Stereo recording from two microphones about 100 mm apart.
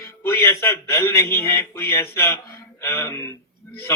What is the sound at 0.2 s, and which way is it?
A man's voice, 30° left (ahead or behind).